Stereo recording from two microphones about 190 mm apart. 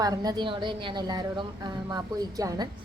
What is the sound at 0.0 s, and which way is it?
A woman's voice, 20° right (ahead or behind).